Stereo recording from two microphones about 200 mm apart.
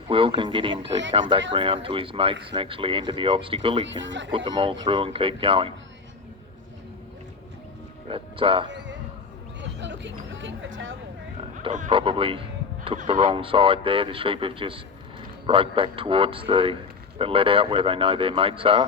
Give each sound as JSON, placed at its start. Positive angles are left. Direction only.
{"t": 0.1, "sound": "a man's voice", "side_deg": -25}
{"t": 4.0, "sound": "speech", "side_deg": -65}
{"t": 4.3, "sound": "a man's voice", "side_deg": -25}
{"t": 8.1, "sound": "speech", "side_deg": -25}
{"t": 9.6, "sound": "a sound", "side_deg": -65}
{"t": 11.6, "sound": "speech", "side_deg": -40}
{"t": 11.9, "sound": "a man's voice", "side_deg": -25}